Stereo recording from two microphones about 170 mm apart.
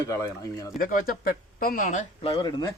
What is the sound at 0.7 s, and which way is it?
Speech, 55° left (ahead or behind).